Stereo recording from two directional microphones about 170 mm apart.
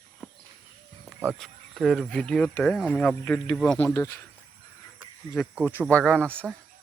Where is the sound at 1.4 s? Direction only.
Centre (ahead or behind); by 4.3 s 15° left (ahead or behind).